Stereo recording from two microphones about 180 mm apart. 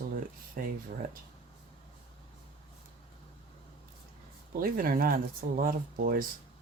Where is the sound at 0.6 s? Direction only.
50° right (ahead or behind).